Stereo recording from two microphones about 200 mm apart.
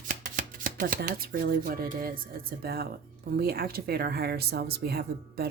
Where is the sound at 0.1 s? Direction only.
45° right (ahead or behind).